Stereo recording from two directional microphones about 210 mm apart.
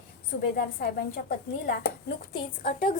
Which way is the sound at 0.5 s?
45° left (ahead or behind).